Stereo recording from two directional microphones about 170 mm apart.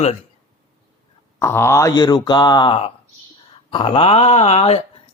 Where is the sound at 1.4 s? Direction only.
15° left (ahead or behind).